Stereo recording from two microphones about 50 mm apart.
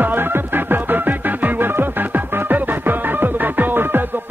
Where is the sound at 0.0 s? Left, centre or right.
Right.